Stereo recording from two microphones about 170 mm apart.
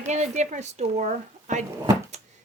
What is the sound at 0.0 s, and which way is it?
Speech, 40° right (ahead or behind).